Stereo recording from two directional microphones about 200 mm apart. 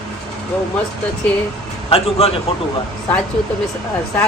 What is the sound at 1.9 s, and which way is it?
Speech, 30° left (ahead or behind).